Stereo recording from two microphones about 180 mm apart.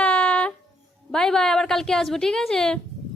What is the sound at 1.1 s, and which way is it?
A woman's voice, 5° left (ahead or behind).